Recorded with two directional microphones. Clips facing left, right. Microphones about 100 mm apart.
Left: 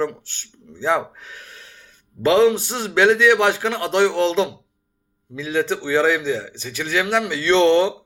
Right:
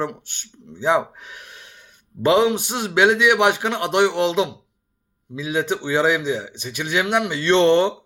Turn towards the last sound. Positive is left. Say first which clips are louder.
# even
turn(degrees=-15)  # may be behind; listen again after turning